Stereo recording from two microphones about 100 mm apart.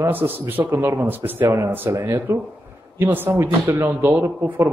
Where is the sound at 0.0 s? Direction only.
20° right (ahead or behind).